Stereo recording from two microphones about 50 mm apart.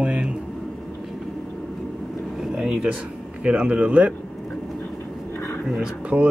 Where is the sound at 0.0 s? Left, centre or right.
Right.